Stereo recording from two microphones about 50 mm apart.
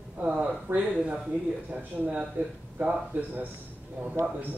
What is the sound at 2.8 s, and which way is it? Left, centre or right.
Speech, right.